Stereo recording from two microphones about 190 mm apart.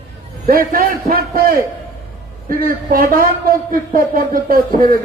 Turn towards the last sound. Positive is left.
turn(degrees=-50)  # may be behind; listen again after turning